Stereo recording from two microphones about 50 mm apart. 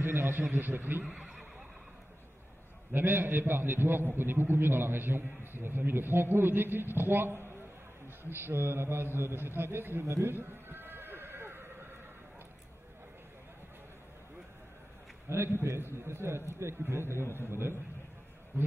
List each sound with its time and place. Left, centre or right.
0.0 s a man's voice: right
1.0 s speech: centre
2.9 s a man's voice: right
10.3 s a sound: right
15.2 s a man's voice: right
16.8 s a man's voice: right